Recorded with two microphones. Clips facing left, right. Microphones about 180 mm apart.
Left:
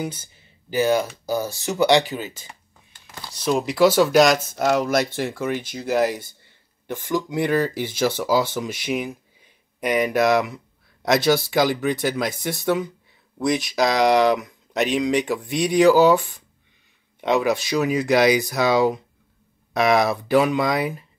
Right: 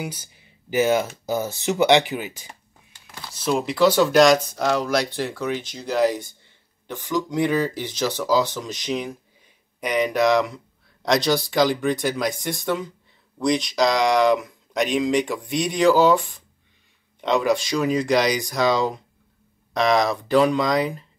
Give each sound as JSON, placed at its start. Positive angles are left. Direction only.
{"t": 0.0, "sound": "speech", "side_deg": -10}
{"t": 3.3, "sound": "speech", "side_deg": 0}
{"t": 7.2, "sound": "speech", "side_deg": 10}